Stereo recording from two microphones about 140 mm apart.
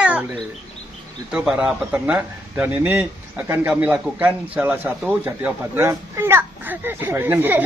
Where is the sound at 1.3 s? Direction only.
10° right (ahead or behind).